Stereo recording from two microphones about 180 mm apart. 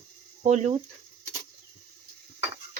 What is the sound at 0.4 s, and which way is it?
Speech, 40° right (ahead or behind).